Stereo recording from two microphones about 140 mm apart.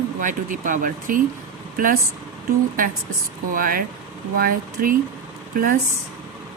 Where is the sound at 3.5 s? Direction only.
90° right.